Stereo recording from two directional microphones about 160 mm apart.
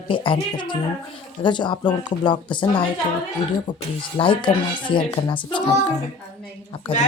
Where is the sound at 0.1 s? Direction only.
30° left (ahead or behind).